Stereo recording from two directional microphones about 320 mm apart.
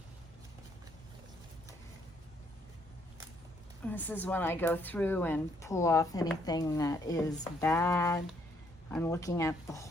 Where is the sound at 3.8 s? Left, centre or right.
Centre.